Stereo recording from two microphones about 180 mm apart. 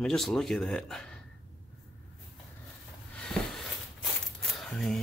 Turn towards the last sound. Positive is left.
turn(degrees=0)  # may be behind; listen again after turning